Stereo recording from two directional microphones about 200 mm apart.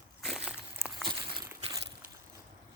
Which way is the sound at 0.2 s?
Centre (ahead or behind).